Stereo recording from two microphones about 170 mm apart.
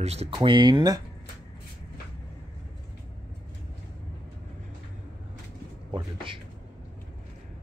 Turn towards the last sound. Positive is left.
turn(degrees=-30)  # may be behind; listen again after turning